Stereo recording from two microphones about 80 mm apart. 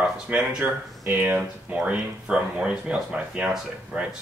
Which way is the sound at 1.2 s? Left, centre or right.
Right.